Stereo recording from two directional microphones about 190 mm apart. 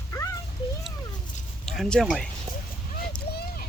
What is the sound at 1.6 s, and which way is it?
Speech, centre (ahead or behind).